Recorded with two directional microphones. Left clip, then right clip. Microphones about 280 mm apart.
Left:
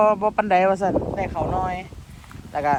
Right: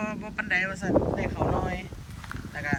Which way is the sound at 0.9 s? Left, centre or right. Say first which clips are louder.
Left 2 dB; centre.